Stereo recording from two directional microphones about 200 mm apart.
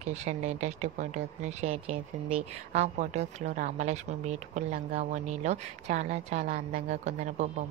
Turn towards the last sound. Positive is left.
turn(degrees=-35)  # may be behind; listen again after turning